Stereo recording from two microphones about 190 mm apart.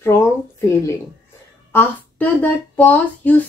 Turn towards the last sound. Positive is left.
turn(degrees=10)  # may be behind; listen again after turning